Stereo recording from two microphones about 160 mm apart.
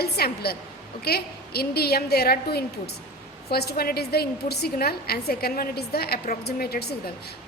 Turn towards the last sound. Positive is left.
turn(degrees=75)  # may be behind; listen again after turning